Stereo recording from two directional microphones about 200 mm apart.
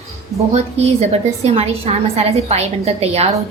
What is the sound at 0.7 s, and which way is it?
A woman's voice, 30° right (ahead or behind).